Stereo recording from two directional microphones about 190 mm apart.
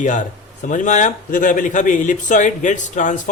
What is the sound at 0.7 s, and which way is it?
Speech, 40° left (ahead or behind).